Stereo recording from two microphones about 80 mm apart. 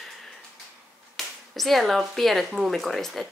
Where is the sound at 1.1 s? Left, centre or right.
Centre.